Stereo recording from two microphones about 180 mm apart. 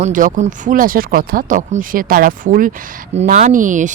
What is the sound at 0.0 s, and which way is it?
Speech, 45° right (ahead or behind).